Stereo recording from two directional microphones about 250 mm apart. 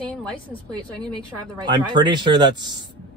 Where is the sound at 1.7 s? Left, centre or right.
Centre.